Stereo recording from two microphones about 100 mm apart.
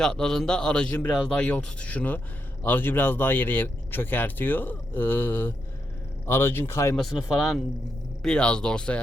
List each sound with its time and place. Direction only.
0.0 s a man's voice: 5° left (ahead or behind); by 6.9 s 25° left (ahead or behind)
6.9 s a man's voice: centre (ahead or behind)